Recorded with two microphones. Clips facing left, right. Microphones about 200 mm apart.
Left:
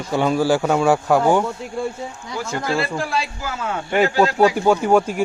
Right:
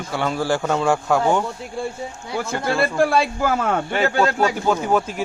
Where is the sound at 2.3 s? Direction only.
60° right (ahead or behind).